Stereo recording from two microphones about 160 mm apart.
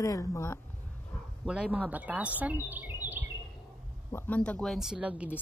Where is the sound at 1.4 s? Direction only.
5° right (ahead or behind).